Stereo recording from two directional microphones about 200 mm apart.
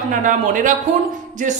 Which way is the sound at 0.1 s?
40° right (ahead or behind).